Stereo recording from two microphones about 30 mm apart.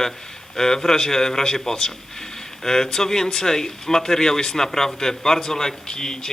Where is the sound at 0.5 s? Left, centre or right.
Centre.